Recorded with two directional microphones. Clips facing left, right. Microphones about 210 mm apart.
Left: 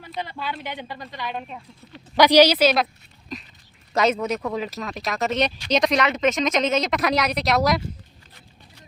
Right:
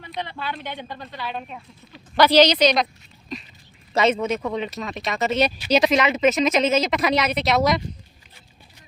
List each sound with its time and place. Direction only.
0.0 s speech: 5° left (ahead or behind)
1.2 s speech: centre (ahead or behind)
2.1 s speech: 15° left (ahead or behind)
3.9 s speech: centre (ahead or behind)